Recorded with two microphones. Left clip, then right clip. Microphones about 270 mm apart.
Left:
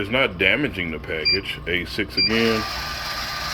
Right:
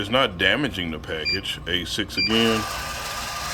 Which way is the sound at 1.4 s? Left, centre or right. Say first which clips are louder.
Left 1 dB; right.